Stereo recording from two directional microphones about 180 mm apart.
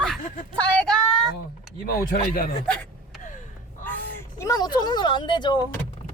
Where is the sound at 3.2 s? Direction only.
45° left (ahead or behind).